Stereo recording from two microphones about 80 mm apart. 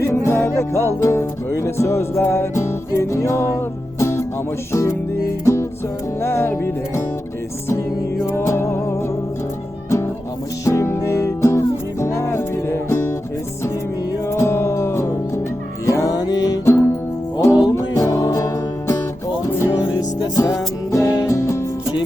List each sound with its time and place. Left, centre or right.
0.0 s music: left
6.2 s music: left
8.4 s music: left
10.7 s music: left
14.3 s music: left
20.0 s music: left